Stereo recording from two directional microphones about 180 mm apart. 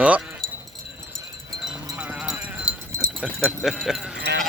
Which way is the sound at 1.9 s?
5° right (ahead or behind).